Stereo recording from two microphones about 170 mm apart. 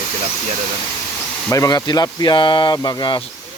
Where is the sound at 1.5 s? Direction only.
20° left (ahead or behind).